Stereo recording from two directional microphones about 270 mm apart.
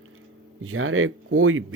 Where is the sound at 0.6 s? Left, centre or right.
Right.